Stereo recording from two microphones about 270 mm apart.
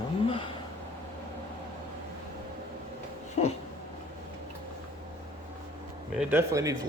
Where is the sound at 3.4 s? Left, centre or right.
Left.